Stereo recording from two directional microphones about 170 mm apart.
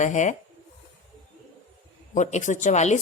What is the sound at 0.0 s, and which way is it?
Speech, 45° left (ahead or behind).